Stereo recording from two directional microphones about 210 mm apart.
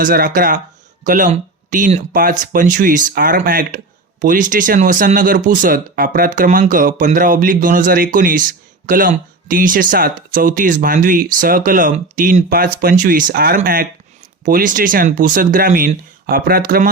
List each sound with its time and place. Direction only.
0.0 s speech: 40° right (ahead or behind)